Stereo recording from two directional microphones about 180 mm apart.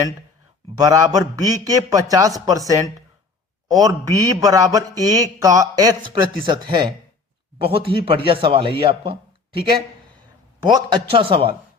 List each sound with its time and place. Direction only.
0.8 s a man's voice: 20° right (ahead or behind)
10.7 s a man's voice: 25° right (ahead or behind)